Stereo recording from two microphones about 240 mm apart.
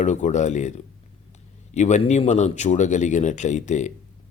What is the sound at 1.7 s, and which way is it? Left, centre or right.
Speech, left.